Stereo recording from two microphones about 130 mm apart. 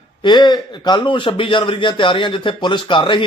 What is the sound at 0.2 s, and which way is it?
A man's voice, 35° left (ahead or behind).